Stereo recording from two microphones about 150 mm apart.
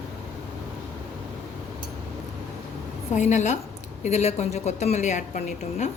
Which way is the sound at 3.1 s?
55° left (ahead or behind).